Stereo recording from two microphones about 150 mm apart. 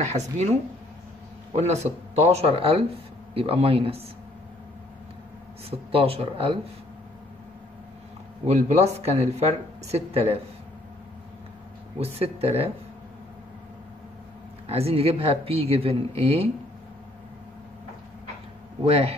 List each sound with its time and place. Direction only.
0.1 s speech: 50° right (ahead or behind)
5.7 s speech: 40° right (ahead or behind)
8.5 s speech: 45° right (ahead or behind)
12.0 s speech: 40° right (ahead or behind)
14.7 s speech: 40° right (ahead or behind)
18.9 s speech: 40° right (ahead or behind)